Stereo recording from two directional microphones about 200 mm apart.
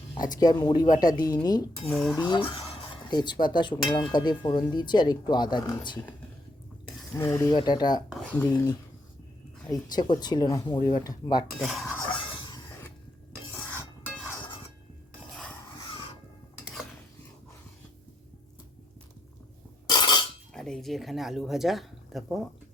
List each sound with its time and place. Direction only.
0.1 s speech: 20° left (ahead or behind)
1.9 s speech: 5° left (ahead or behind)
2.1 s speech: 20° left (ahead or behind)
7.2 s speech: 15° left (ahead or behind)
8.1 s speech: 5° left (ahead or behind)
9.6 s speech: 20° left (ahead or behind)
11.6 s speech: centre (ahead or behind)
11.9 s a sound: 20° left (ahead or behind)
19.9 s a sound: 20° left (ahead or behind)
20.5 s speech: 5° left (ahead or behind)